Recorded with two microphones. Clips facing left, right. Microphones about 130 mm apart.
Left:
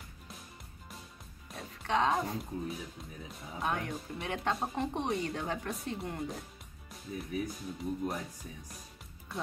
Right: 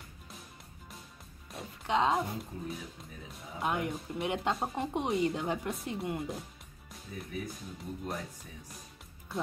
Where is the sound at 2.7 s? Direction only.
Centre (ahead or behind).